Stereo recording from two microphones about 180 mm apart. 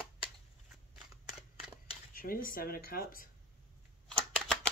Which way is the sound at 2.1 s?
55° left (ahead or behind).